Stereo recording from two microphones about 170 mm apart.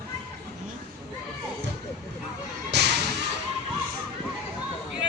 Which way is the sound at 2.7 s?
80° right.